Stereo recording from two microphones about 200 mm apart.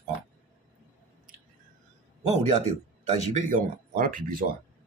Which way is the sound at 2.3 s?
35° right (ahead or behind).